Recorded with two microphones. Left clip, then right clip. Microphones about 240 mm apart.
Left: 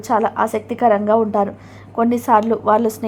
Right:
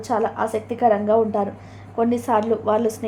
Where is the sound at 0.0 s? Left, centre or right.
Left.